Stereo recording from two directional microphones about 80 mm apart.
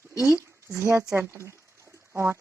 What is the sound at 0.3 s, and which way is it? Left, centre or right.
Speech, right.